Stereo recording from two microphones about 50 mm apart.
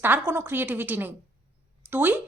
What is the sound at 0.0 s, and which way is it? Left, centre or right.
A woman's voice, right.